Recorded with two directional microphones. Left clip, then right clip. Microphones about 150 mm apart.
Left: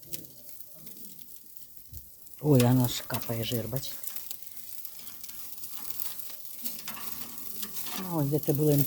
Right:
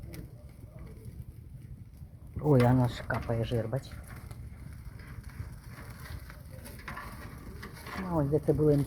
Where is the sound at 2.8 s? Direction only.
15° left (ahead or behind).